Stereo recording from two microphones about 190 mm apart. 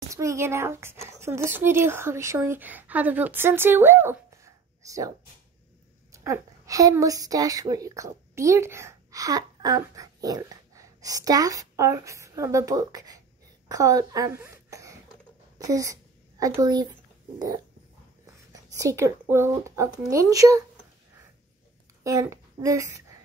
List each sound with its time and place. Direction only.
0.1 s a child's voice: 15° right (ahead or behind)
6.1 s a woman's voice: 15° right (ahead or behind)
15.5 s a sound: 20° right (ahead or behind)
18.8 s a child's voice: 15° right (ahead or behind)
22.0 s a child's voice: 15° right (ahead or behind)